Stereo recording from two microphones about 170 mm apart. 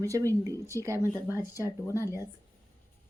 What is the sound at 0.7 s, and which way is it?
Speech, 20° right (ahead or behind).